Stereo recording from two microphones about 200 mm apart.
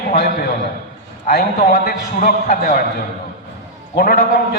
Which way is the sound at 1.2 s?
50° left (ahead or behind).